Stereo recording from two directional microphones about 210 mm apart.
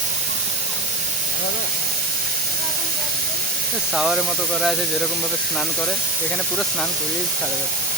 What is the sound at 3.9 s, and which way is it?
Speech, 5° right (ahead or behind).